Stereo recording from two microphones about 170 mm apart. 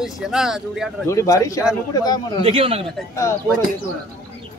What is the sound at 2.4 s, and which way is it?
Speech, 35° right (ahead or behind).